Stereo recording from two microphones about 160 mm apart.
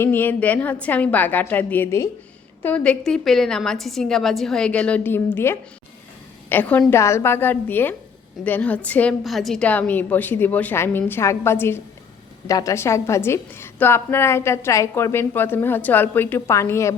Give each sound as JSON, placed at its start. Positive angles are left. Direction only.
{"t": 0.0, "sound": "a woman's voice", "side_deg": 10}